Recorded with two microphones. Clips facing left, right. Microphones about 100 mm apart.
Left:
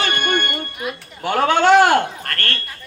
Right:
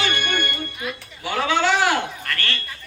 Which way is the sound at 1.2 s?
50° left (ahead or behind).